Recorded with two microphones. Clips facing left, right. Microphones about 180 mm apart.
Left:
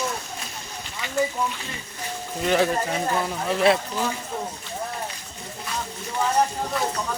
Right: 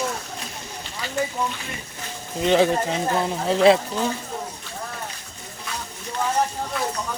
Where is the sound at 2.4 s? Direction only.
25° right (ahead or behind).